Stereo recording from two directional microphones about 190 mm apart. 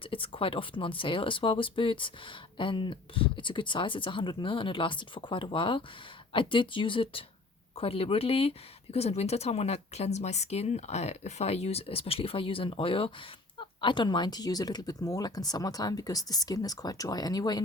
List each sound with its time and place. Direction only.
0.0 s speech: 25° left (ahead or behind)